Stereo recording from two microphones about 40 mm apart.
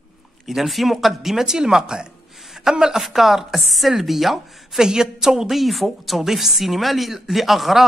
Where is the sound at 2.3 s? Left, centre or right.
Centre.